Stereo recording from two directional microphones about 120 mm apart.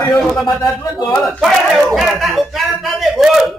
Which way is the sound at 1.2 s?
Centre (ahead or behind).